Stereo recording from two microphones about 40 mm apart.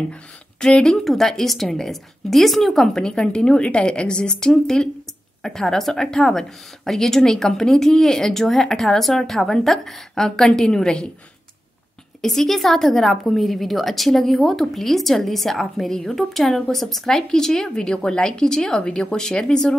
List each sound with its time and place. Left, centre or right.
0.1 s a woman's voice: centre
3.0 s a woman's voice: left
12.2 s a woman's voice: centre
17.1 s speech: centre